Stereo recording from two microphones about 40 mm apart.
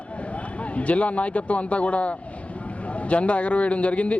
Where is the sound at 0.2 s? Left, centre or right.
Left.